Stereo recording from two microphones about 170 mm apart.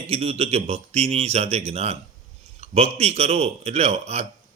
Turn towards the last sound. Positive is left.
turn(degrees=-40)  # may be behind; listen again after turning